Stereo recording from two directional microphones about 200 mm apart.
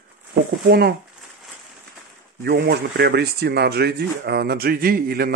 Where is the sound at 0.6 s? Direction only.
50° right (ahead or behind).